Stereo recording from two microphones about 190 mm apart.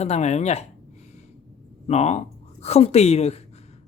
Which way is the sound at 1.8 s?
35° left (ahead or behind).